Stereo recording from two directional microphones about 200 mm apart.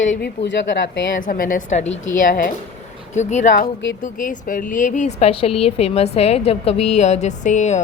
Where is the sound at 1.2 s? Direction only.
45° left (ahead or behind).